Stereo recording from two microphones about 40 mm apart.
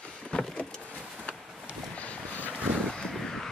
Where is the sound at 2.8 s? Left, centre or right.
Centre.